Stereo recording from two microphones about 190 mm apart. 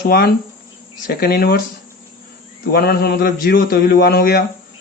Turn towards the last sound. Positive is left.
turn(degrees=50)  # may be behind; listen again after turning